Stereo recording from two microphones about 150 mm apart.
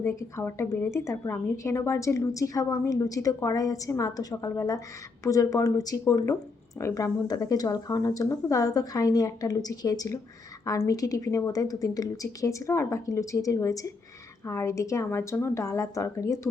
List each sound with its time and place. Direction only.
0.0 s a woman's voice: 20° left (ahead or behind)